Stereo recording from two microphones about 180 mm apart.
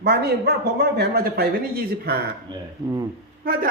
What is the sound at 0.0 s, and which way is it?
Speech, 65° right (ahead or behind).